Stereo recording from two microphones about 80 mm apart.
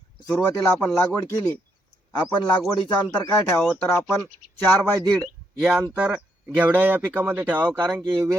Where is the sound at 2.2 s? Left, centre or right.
Left.